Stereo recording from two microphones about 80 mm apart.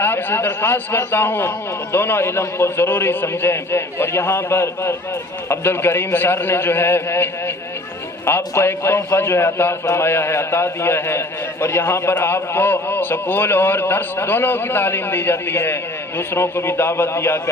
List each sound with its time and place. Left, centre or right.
0.0 s a man's voice: left